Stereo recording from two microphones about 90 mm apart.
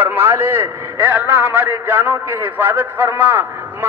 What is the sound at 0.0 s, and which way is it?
A man's voice, 25° right (ahead or behind).